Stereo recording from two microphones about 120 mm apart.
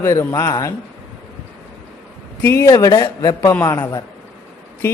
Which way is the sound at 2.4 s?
20° left (ahead or behind).